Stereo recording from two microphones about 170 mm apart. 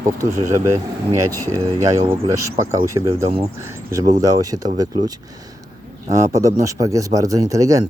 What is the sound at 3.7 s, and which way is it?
Speech, 15° right (ahead or behind).